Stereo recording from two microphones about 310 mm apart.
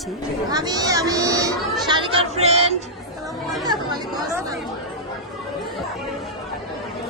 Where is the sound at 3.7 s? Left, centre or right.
Centre.